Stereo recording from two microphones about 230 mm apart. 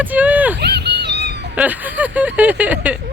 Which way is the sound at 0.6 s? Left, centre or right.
Right.